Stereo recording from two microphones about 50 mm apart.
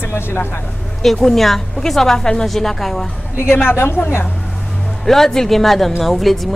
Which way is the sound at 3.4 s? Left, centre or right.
Left.